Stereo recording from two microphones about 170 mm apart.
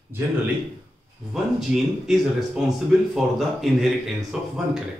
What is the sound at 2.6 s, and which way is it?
Speech, centre (ahead or behind).